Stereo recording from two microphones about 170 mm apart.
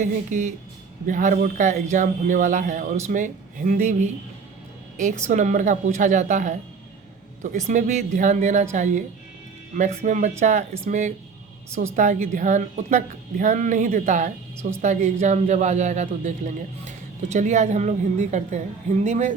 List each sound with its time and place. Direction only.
0.0 s speech: 45° right (ahead or behind)
5.3 s speech: 45° right (ahead or behind)